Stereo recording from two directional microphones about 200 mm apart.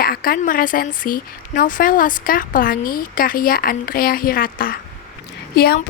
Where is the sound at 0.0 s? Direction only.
45° left (ahead or behind).